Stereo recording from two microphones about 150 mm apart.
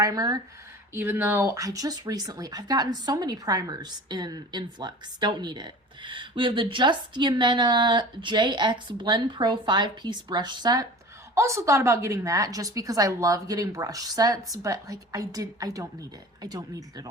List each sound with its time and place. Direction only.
0.0 s speech: 25° right (ahead or behind)